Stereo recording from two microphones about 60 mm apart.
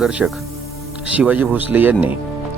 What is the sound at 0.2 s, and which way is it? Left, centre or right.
Speech, centre.